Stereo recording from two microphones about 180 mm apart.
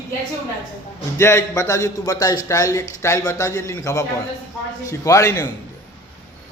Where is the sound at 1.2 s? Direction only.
15° left (ahead or behind).